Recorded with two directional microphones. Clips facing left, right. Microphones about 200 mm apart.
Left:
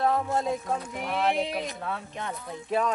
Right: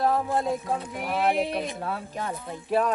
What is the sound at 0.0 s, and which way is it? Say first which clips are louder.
Music: right 1 dB; centre (ahead or behind).